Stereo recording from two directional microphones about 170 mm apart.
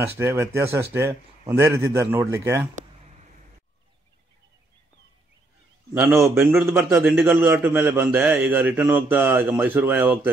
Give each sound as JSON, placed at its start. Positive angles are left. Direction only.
{"t": 0.2, "sound": "a man's voice", "side_deg": -15}
{"t": 5.9, "sound": "a man's voice", "side_deg": -15}